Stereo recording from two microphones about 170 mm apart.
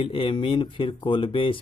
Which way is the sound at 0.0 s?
30° left (ahead or behind).